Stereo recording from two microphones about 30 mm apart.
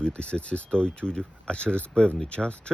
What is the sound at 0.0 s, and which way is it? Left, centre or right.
Speech, left.